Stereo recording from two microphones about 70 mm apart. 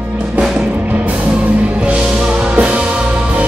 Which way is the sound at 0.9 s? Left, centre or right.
Right.